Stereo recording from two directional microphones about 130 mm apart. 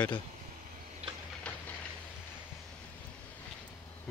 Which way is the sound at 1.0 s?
50° right (ahead or behind).